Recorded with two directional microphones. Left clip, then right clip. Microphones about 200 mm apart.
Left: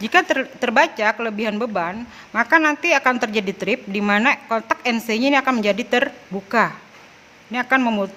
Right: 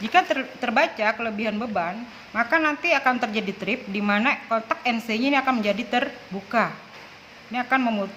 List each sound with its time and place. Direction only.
0.0 s speech: 50° left (ahead or behind)
6.3 s speech: 60° left (ahead or behind)
7.5 s speech: 50° left (ahead or behind)